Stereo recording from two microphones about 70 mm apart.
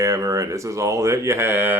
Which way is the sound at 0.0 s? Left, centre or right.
Right.